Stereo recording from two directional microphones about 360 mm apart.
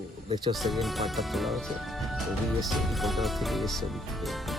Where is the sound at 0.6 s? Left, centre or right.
Centre.